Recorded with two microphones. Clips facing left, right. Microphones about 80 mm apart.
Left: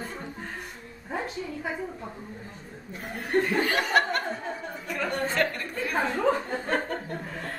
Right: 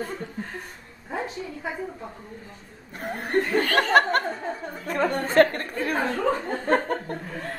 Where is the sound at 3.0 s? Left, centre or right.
Right.